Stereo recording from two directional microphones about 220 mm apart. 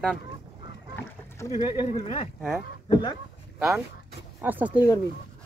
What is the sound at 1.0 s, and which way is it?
Boat, 10° left (ahead or behind).